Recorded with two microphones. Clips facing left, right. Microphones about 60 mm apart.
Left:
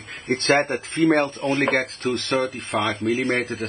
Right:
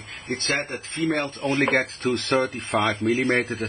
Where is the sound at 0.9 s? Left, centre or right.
Left.